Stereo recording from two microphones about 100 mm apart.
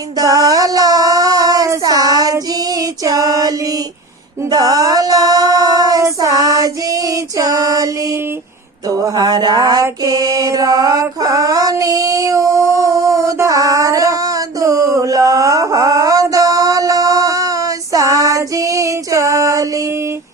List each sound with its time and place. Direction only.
0.2 s child singing: 40° right (ahead or behind)
4.4 s a sound: 40° right (ahead or behind)
6.1 s female singing: 40° right (ahead or behind)
8.9 s a sound: 35° right (ahead or behind)
9.8 s mantra: 35° right (ahead or behind)
11.2 s child singing: 35° right (ahead or behind)